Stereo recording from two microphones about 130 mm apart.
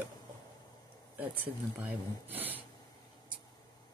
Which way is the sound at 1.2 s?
15° right (ahead or behind).